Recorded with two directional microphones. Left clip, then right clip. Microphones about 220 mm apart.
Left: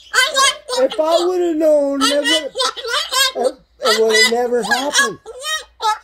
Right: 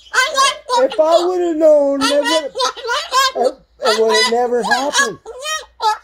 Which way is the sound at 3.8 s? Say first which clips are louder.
Even; 5° right (ahead or behind).